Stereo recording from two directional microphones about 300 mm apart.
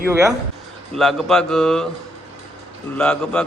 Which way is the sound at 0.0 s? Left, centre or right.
Centre.